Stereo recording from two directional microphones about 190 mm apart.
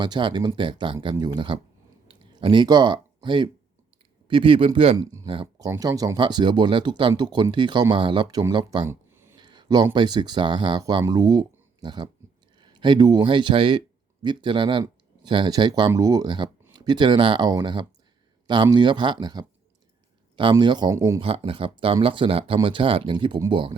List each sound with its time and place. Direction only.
0.0 s speech: 25° right (ahead or behind)
8.9 s a sound: 10° right (ahead or behind)
9.4 s speech: 25° right (ahead or behind)
21.2 s speech: 30° right (ahead or behind)